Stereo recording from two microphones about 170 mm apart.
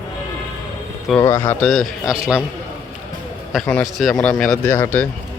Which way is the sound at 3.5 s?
5° left (ahead or behind).